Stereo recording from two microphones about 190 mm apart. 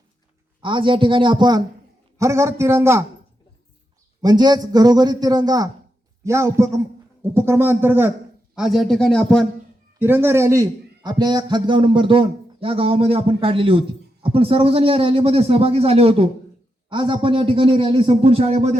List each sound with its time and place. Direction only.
0.6 s a man's voice: 25° right (ahead or behind)
4.2 s a man's voice: 20° right (ahead or behind); by 9.5 s 5° left (ahead or behind)
10.0 s a man's voice: 10° right (ahead or behind); by 18.8 s 35° right (ahead or behind)